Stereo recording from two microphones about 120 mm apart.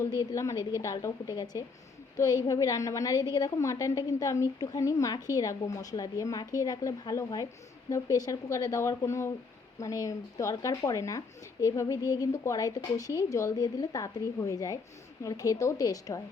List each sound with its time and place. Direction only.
0.2 s a woman's voice: 30° left (ahead or behind)